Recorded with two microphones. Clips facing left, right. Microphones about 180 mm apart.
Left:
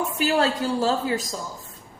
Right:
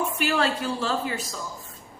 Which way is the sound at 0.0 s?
40° left (ahead or behind).